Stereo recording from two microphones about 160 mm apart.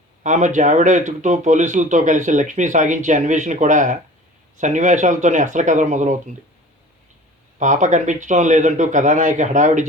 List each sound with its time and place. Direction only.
0.2 s speech: 50° right (ahead or behind)
7.6 s speech: 50° right (ahead or behind)